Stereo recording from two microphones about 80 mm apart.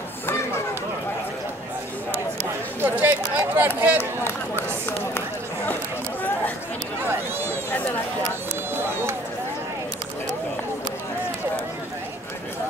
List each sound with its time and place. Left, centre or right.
2.8 s speech: right
4.0 s speech: left
7.1 s speech: right